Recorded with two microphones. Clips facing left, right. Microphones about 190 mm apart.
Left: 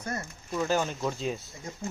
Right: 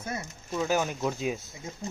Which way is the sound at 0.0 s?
5° right (ahead or behind).